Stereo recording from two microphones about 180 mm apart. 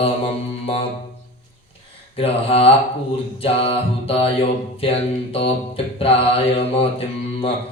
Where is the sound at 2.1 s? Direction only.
35° left (ahead or behind).